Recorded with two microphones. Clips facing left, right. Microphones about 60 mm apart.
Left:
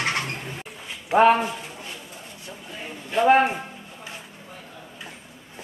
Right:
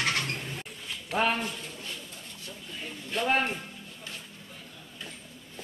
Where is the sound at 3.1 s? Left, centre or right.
Left.